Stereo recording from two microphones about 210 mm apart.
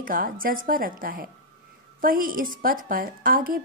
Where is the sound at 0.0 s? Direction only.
40° right (ahead or behind).